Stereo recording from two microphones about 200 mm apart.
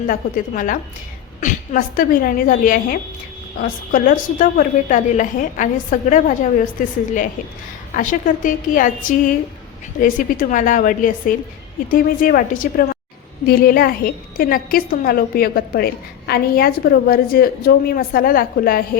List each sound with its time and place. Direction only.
0.1 s a woman's voice: 40° left (ahead or behind)